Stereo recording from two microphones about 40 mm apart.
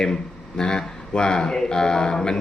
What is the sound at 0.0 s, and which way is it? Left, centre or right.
Speech, centre.